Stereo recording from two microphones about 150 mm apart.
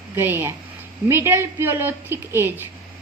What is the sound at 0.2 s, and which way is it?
A woman's voice, 15° right (ahead or behind).